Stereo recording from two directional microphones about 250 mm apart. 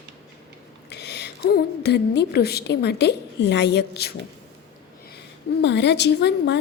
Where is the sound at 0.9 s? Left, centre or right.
Left.